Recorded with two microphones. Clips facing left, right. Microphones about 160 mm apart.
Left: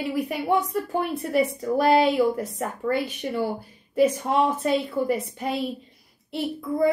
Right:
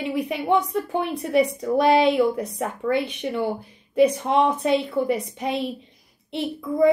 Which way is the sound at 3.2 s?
20° right (ahead or behind).